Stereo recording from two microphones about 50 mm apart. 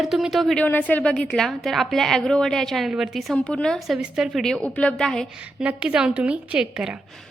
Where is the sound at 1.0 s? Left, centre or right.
Left.